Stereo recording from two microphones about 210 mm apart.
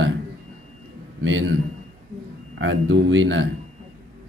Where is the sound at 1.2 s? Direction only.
60° right (ahead or behind).